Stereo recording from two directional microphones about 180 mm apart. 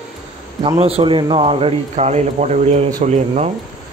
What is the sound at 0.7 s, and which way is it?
Speech, 35° right (ahead or behind).